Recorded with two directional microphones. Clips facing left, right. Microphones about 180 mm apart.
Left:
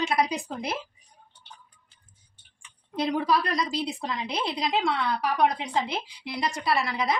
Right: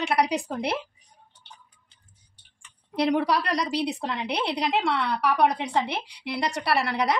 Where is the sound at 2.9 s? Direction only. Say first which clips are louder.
Right 2 dB; 70° right (ahead or behind).